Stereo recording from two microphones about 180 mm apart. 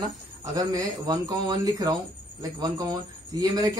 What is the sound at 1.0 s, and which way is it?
Speech, 25° right (ahead or behind).